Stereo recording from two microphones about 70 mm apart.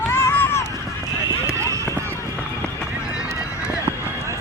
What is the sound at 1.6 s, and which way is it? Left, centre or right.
Run, right.